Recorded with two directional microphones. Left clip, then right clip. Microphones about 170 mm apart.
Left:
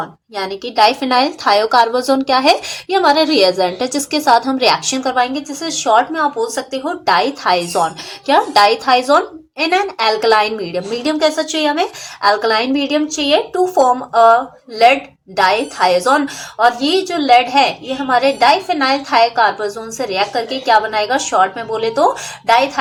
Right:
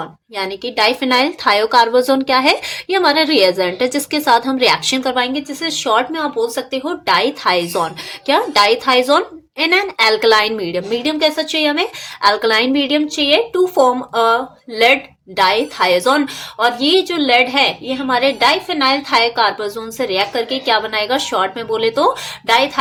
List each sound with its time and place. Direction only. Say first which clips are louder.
0.3 s a woman's voice: left 3 dB; 15° right (ahead or behind)
15.4 s a woman's voice: left 1 dB; 25° right (ahead or behind)
18.4 s a woman's voice: left 1 dB; 20° right (ahead or behind)